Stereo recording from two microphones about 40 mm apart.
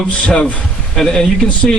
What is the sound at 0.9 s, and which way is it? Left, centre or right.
Speech, centre.